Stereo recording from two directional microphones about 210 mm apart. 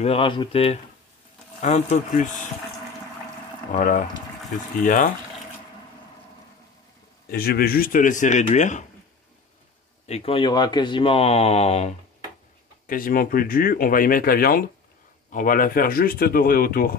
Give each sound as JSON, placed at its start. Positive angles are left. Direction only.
{"t": 0.0, "sound": "speech", "side_deg": 25}
{"t": 3.7, "sound": "speech", "side_deg": 40}
{"t": 7.2, "sound": "speech", "side_deg": 45}
{"t": 10.0, "sound": "speech", "side_deg": 30}
{"t": 12.8, "sound": "speech", "side_deg": 40}